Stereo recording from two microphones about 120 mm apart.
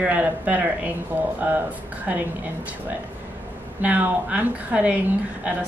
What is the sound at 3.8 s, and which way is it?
Speech, 15° right (ahead or behind).